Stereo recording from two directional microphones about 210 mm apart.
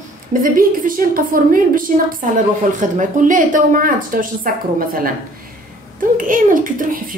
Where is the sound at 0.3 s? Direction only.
40° right (ahead or behind).